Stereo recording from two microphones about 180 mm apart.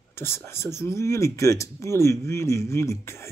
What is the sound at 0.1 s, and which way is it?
Speech, 15° left (ahead or behind).